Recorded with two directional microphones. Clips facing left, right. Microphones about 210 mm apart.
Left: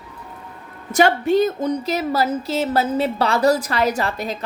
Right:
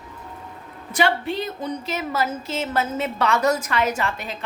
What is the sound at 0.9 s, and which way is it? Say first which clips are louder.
Speech: left 6 dB; 45° left (ahead or behind).